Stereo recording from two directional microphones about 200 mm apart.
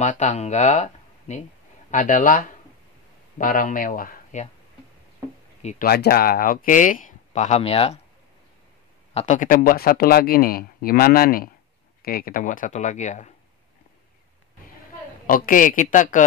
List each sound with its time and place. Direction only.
0.0 s speech: 35° left (ahead or behind)
5.6 s speech: 35° left (ahead or behind)
5.9 s speech: 50° left (ahead or behind); by 8.0 s 30° left (ahead or behind)
9.1 s speech: 35° left (ahead or behind)
15.2 s speech: 45° left (ahead or behind)